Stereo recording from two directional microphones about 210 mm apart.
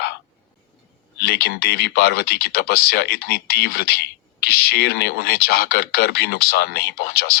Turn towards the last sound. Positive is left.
turn(degrees=50)  # may be behind; listen again after turning